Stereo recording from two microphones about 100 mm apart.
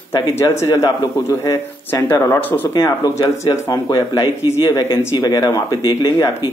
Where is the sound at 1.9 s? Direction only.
20° left (ahead or behind).